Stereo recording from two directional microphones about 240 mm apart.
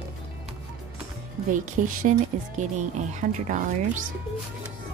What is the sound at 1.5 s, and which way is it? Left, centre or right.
Speech, right.